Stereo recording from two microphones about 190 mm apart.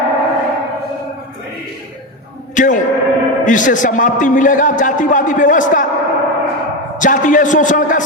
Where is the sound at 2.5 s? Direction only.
45° left (ahead or behind).